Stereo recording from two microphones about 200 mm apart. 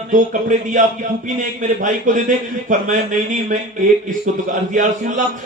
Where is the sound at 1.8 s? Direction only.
40° right (ahead or behind).